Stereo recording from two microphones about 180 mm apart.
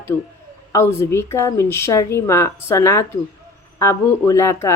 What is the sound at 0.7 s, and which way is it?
Speech, 15° left (ahead or behind).